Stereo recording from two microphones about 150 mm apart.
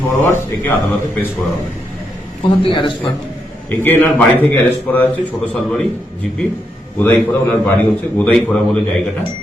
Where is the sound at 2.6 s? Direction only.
35° left (ahead or behind).